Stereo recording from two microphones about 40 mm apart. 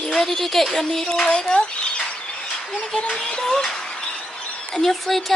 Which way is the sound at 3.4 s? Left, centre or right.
Centre.